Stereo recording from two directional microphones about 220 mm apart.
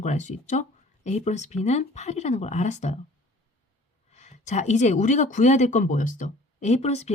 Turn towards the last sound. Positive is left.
turn(degrees=30)  # may be behind; listen again after turning